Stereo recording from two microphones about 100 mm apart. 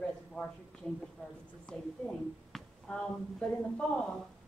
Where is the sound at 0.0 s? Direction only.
10° left (ahead or behind).